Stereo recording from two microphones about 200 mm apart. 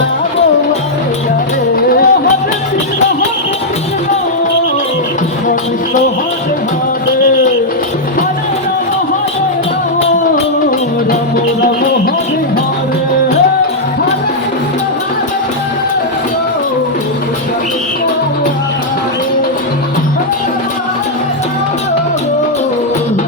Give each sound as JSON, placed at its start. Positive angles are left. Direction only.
{"t": 1.9, "sound": "music", "side_deg": 45}